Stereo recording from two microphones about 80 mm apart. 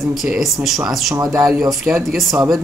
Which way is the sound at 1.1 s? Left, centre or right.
Right.